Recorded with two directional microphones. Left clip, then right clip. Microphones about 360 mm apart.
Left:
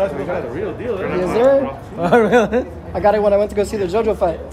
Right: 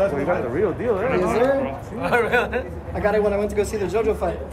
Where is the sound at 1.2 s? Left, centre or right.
Centre.